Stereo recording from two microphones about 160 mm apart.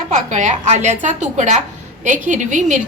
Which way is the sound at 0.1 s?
50° right (ahead or behind).